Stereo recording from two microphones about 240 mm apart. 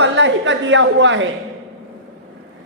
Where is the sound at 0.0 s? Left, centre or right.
Right.